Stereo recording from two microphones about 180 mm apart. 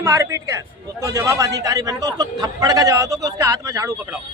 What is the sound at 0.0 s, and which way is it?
A man's voice, 15° right (ahead or behind).